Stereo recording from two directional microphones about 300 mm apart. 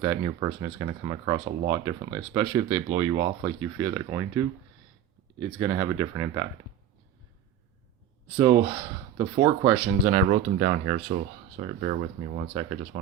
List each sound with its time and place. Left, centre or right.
0.0 s speech: centre
9.1 s speech: centre